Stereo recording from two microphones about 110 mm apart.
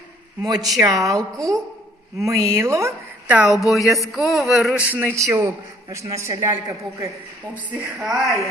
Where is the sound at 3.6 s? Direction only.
Centre (ahead or behind).